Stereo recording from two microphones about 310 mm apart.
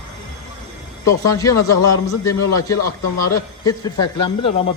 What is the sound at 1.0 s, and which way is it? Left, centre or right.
A man's voice, centre.